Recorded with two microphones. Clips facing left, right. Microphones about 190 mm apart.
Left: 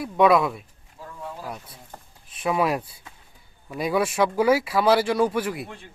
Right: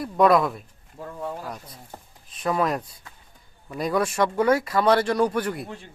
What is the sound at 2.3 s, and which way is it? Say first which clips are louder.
Speech: left 1 dB; 5° left (ahead or behind).